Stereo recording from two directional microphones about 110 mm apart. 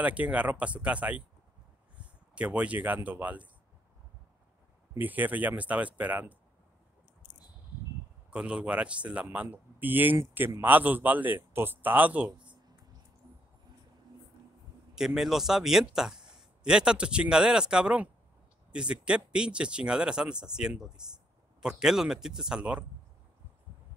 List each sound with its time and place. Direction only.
0.0 s speech: 10° right (ahead or behind)
2.3 s speech: 10° right (ahead or behind)
5.0 s speech: 15° right (ahead or behind)
8.3 s speech: 10° right (ahead or behind)
15.0 s speech: 5° right (ahead or behind)